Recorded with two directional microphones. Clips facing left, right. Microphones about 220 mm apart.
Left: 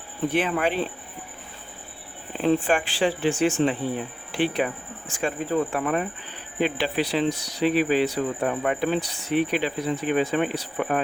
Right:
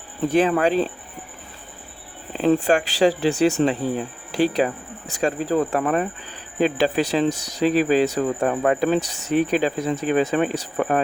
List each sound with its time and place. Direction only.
0.3 s speech: 40° right (ahead or behind)
2.5 s speech: 40° right (ahead or behind)